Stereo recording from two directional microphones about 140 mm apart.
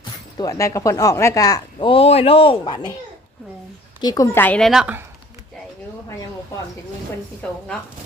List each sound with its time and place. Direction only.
0.0 s speech: 25° left (ahead or behind)
1.9 s speech: 45° left (ahead or behind)
4.0 s a woman's voice: 25° left (ahead or behind); by 4.9 s 5° right (ahead or behind)
7.4 s a woman's voice: 10° left (ahead or behind)